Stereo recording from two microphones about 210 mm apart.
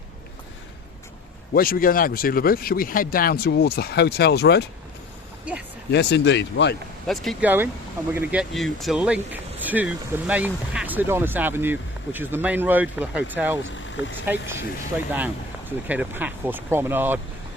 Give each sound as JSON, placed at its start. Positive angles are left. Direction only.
{"t": 1.5, "sound": "speech", "side_deg": 45}
{"t": 5.9, "sound": "speech", "side_deg": 55}
{"t": 7.1, "sound": "speech", "side_deg": 0}